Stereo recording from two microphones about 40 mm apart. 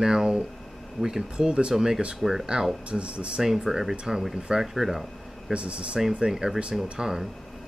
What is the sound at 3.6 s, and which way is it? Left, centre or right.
Speech, centre.